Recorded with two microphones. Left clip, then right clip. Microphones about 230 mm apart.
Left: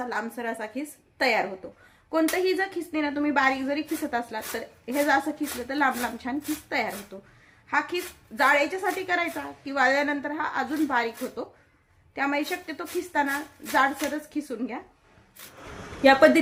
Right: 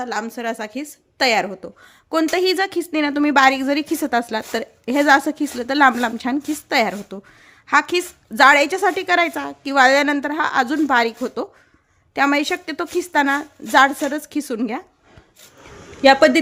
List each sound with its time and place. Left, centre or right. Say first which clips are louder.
0.0 s speech: right 6 dB; right
16.0 s speech: right 5 dB; right